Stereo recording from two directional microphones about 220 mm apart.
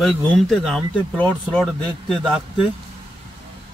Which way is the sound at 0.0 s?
Centre (ahead or behind).